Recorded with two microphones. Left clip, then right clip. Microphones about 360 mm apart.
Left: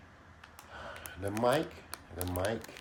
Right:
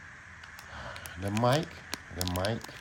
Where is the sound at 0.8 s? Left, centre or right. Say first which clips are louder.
Right 1 dB; right.